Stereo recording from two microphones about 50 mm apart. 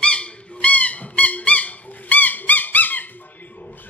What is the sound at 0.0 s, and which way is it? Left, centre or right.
Music, left.